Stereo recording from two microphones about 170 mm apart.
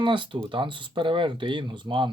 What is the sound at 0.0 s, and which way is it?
Speech, 30° right (ahead or behind).